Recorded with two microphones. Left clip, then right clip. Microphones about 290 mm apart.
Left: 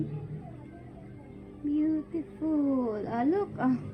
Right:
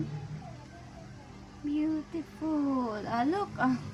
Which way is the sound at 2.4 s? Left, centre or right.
Centre.